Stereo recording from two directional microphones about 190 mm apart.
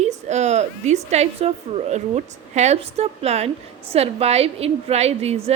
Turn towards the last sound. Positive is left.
turn(degrees=-35)  # may be behind; listen again after turning